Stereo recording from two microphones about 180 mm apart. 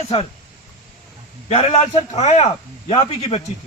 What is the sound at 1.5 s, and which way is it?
Speech, 35° left (ahead or behind).